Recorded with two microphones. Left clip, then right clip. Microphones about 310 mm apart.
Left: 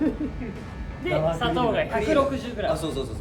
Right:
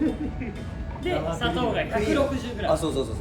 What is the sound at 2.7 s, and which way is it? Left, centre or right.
Speech, centre.